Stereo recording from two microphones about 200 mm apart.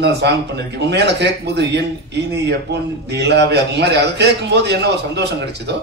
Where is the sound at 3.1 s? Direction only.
60° right (ahead or behind).